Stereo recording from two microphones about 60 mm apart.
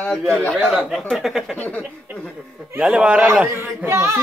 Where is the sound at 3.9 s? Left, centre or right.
Right.